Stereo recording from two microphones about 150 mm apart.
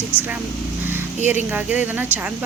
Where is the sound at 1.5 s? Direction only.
10° right (ahead or behind).